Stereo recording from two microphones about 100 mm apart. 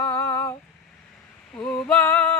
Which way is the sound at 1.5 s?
10° left (ahead or behind).